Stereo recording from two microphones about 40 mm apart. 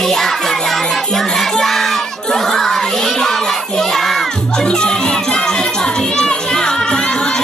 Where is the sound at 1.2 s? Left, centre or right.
Centre.